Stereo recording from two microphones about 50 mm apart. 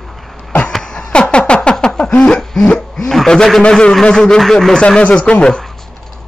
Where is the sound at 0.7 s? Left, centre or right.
Centre.